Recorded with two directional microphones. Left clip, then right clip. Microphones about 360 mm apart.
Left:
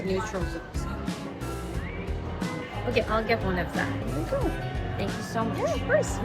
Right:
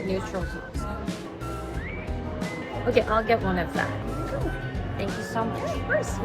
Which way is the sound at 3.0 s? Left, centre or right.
Centre.